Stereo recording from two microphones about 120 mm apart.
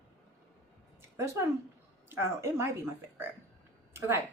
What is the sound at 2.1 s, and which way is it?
Speech, 20° right (ahead or behind).